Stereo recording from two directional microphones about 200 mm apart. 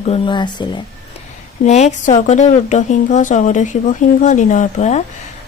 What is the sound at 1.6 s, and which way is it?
Speech, 35° left (ahead or behind).